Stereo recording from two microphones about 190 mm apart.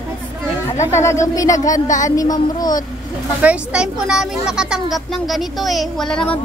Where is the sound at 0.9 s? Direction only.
15° left (ahead or behind).